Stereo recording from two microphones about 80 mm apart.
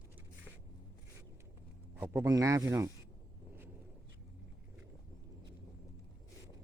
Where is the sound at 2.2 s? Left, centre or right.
Right.